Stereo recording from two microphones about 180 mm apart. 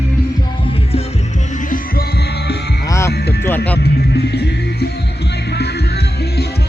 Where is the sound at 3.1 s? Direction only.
65° left (ahead or behind).